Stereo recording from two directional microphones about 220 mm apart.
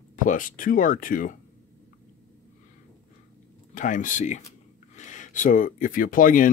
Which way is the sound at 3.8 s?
35° left (ahead or behind).